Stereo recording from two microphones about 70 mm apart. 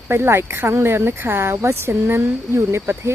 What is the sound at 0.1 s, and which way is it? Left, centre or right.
Speech, right.